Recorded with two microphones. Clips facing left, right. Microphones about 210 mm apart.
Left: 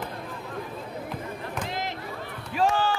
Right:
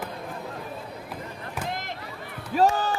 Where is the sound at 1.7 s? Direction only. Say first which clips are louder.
Left 2 dB; 50° right (ahead or behind).